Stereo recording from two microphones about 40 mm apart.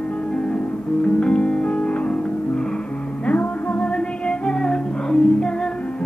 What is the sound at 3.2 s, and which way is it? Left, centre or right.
Music, left.